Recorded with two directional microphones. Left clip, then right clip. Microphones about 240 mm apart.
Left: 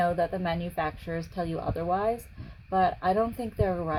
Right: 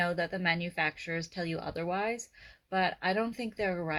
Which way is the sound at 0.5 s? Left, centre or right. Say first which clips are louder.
Left 1 dB; centre.